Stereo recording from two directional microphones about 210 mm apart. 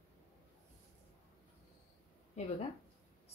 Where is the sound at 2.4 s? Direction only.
30° left (ahead or behind).